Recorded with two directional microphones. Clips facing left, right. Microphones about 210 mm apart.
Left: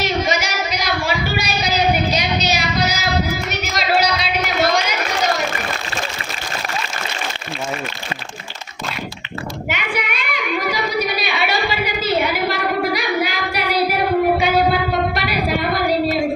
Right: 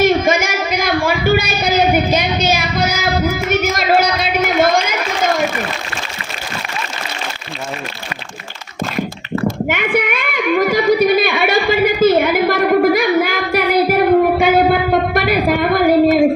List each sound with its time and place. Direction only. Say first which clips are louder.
0.0 s child singing: right 7 dB; 50° right (ahead or behind)
3.5 s a sound: right 7 dB; 50° right (ahead or behind)
9.6 s child singing: right 7 dB; 50° right (ahead or behind)